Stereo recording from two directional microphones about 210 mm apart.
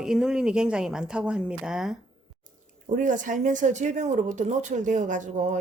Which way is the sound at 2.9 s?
40° right (ahead or behind).